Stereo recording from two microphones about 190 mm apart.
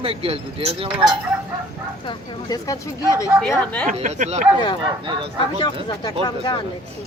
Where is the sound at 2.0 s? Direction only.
25° left (ahead or behind); by 3.9 s 5° left (ahead or behind).